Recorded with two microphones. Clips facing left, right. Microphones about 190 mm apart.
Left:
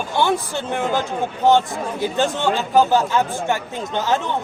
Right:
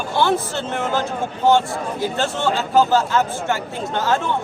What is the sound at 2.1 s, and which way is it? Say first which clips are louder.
Speech: left 3 dB; 15° left (ahead or behind).